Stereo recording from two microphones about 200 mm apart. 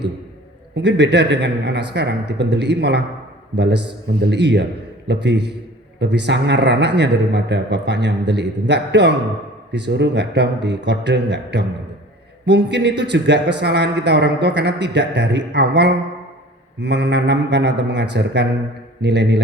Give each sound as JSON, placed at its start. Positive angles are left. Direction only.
{"t": 0.8, "sound": "a man's voice", "side_deg": -60}